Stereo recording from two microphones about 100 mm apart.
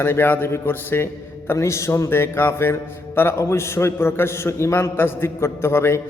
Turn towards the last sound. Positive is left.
turn(degrees=25)  # may be behind; listen again after turning